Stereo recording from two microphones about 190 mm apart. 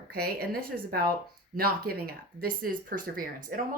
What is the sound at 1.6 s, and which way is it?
Speech, 55° right (ahead or behind).